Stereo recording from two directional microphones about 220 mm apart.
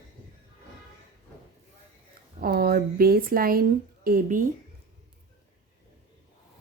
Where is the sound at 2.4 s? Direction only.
45° right (ahead or behind).